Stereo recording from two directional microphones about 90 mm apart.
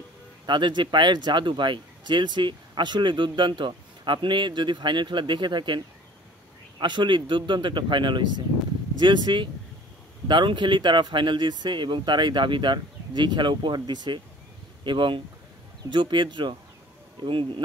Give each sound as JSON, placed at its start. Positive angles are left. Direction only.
{"t": 0.5, "sound": "speech", "side_deg": -60}
{"t": 6.8, "sound": "speech", "side_deg": -60}